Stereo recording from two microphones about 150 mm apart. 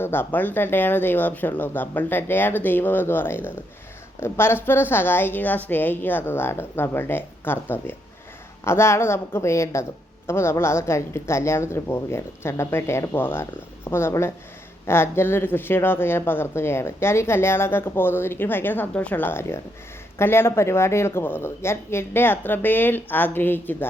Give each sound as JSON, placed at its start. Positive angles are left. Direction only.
{"t": 0.0, "sound": "speech", "side_deg": 15}